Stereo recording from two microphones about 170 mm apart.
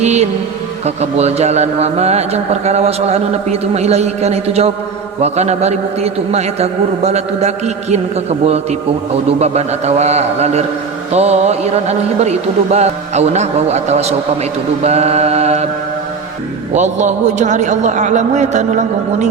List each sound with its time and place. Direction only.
0.0 s a man's voice: 40° right (ahead or behind)
16.7 s a man's voice: 45° right (ahead or behind)